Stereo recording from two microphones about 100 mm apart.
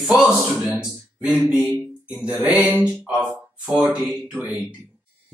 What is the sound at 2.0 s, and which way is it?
Mantra, 10° right (ahead or behind).